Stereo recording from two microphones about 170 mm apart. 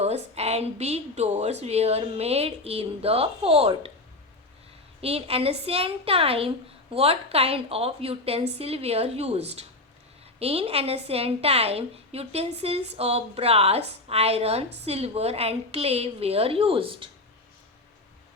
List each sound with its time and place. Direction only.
0.0 s a woman's voice: 40° right (ahead or behind)
4.9 s a woman's voice: 35° right (ahead or behind)